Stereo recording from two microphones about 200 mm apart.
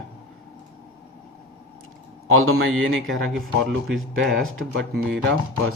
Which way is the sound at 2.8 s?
75° right (ahead or behind).